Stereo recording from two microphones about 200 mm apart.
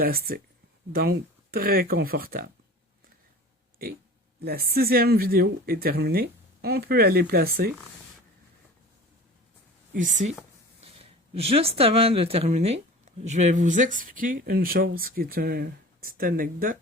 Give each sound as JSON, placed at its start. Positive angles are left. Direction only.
{"t": 0.0, "sound": "speech", "side_deg": -50}
{"t": 4.4, "sound": "speech", "side_deg": -50}
{"t": 9.9, "sound": "speech", "side_deg": -40}
{"t": 11.3, "sound": "speech", "side_deg": -30}